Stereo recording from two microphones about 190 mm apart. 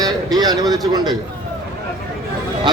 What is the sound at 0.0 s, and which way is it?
A man's voice, 20° right (ahead or behind).